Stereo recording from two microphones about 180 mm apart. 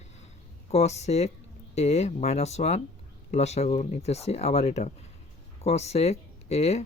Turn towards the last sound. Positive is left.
turn(degrees=35)  # may be behind; listen again after turning